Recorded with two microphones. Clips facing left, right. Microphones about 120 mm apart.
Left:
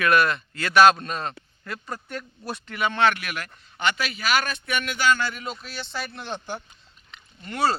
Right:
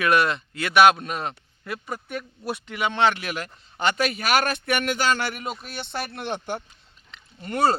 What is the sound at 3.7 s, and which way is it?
A man's voice, 40° right (ahead or behind).